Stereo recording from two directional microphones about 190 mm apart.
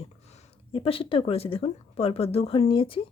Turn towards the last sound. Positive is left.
turn(degrees=25)  # may be behind; listen again after turning